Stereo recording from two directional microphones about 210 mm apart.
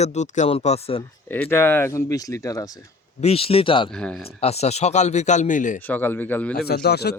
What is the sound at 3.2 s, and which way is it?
Speech, 30° left (ahead or behind).